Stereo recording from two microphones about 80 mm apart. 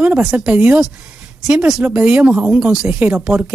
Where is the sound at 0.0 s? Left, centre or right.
Centre.